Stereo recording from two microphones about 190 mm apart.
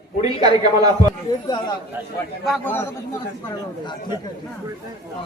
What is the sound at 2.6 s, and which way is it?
Speech, 10° left (ahead or behind).